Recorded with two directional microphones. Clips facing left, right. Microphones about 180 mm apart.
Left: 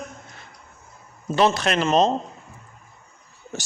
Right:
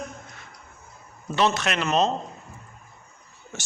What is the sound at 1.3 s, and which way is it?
Speech, 35° left (ahead or behind).